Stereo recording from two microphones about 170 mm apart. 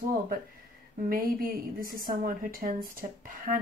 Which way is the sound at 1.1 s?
55° right (ahead or behind).